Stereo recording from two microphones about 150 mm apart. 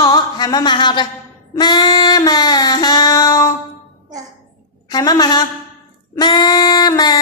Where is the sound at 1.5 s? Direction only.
30° left (ahead or behind).